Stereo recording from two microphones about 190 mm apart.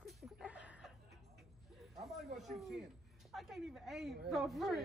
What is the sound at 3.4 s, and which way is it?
A woman's voice, centre (ahead or behind).